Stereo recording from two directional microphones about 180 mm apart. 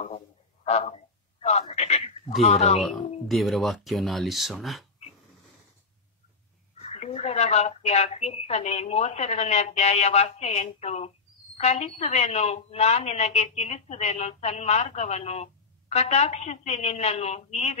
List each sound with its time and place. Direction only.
0.7 s a woman's voice: 35° left (ahead or behind)
1.4 s a sound: 35° left (ahead or behind)
2.4 s a woman's voice: 35° left (ahead or behind)
2.8 s speech: centre (ahead or behind)
6.8 s a woman's voice: 35° left (ahead or behind)